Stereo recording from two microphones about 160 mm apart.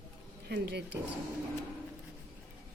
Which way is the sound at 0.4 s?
90° right.